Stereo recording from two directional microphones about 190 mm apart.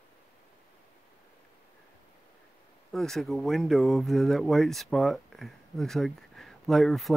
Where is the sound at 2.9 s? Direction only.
Centre (ahead or behind).